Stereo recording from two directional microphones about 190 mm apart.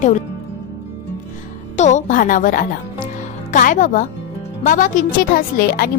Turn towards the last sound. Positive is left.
turn(degrees=50)  # may be behind; listen again after turning